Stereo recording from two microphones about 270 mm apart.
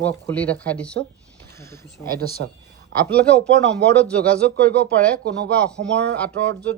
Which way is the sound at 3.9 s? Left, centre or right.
Centre.